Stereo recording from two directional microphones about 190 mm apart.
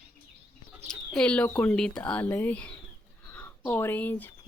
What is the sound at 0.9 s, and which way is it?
Speech, 5° left (ahead or behind).